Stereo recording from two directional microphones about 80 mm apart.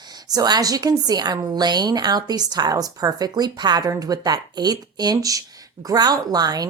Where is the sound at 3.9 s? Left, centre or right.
Right.